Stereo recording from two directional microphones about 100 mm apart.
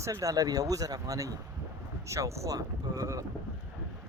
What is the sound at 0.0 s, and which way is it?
Speech, 35° right (ahead or behind).